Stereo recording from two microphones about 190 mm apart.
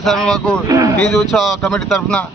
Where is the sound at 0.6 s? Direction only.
20° right (ahead or behind).